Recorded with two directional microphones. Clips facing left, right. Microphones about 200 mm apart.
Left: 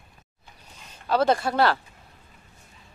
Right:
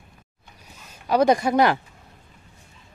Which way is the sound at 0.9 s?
15° right (ahead or behind).